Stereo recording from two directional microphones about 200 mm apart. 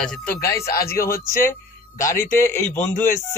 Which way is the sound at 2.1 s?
10° left (ahead or behind).